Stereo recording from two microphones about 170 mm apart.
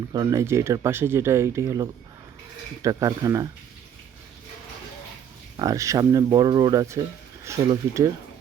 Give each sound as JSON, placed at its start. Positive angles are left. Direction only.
{"t": 0.1, "sound": "speech", "side_deg": -20}
{"t": 5.5, "sound": "speech", "side_deg": -20}